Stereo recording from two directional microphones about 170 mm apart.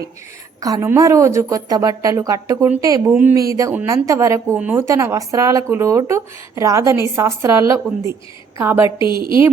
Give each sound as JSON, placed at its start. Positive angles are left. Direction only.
{"t": 0.6, "sound": "a woman's voice", "side_deg": -20}
{"t": 9.0, "sound": "a woman's voice", "side_deg": 25}